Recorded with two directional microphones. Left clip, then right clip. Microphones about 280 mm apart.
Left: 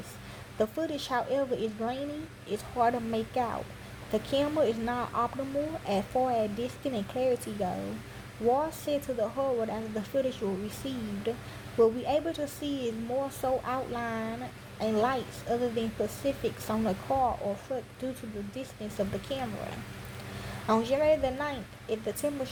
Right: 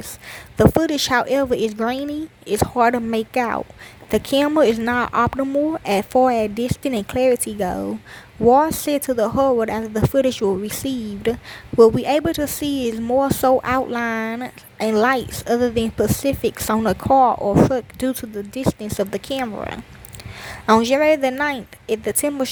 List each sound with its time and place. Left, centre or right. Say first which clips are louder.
0.6 s speech: right 14 dB; right